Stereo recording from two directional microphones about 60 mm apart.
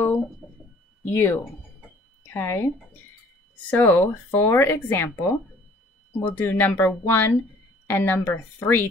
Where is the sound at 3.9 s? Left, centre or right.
Left.